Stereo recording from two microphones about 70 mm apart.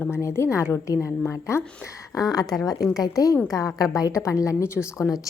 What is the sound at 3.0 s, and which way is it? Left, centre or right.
A woman's voice, left.